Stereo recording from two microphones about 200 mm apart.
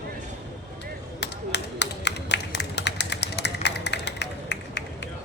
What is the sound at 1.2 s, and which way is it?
Tap, 60° left (ahead or behind).